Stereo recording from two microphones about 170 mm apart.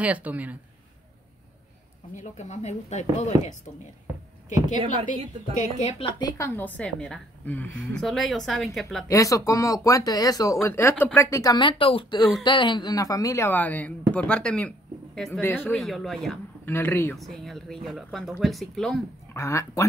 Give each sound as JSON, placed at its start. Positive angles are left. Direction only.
{"t": 0.0, "sound": "speech", "side_deg": -10}
{"t": 2.1, "sound": "speech", "side_deg": 45}
{"t": 5.6, "sound": "a woman's voice", "side_deg": 40}
{"t": 9.0, "sound": "a woman's voice", "side_deg": 20}
{"t": 15.7, "sound": "speech", "side_deg": 0}
{"t": 16.6, "sound": "a woman's voice", "side_deg": 15}
{"t": 17.1, "sound": "speech", "side_deg": 0}
{"t": 19.3, "sound": "a woman's voice", "side_deg": 15}